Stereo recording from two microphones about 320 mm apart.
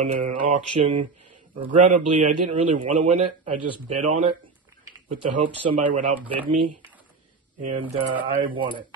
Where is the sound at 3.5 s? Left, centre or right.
Right.